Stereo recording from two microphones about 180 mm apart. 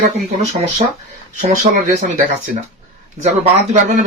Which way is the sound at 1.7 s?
35° right (ahead or behind).